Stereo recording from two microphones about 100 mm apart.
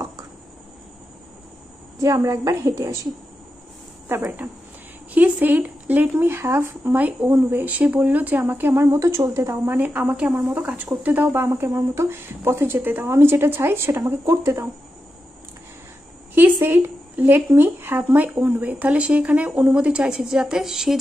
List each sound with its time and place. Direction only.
2.0 s a woman's voice: 30° right (ahead or behind)
4.1 s speech: 20° right (ahead or behind)
16.3 s speech: 20° right (ahead or behind)